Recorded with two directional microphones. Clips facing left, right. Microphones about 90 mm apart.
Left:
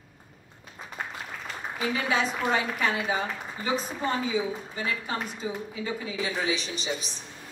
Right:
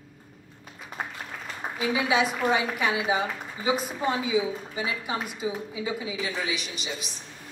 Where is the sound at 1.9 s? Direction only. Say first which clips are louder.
Right 3 dB; 10° right (ahead or behind).